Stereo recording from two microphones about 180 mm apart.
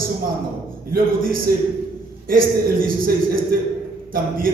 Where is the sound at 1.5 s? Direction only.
55° right (ahead or behind).